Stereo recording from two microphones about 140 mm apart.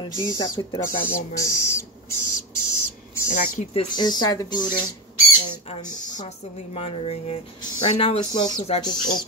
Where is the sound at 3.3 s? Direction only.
70° left (ahead or behind).